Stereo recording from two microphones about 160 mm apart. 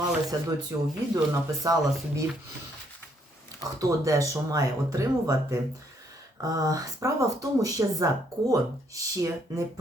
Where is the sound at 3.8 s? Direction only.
20° right (ahead or behind).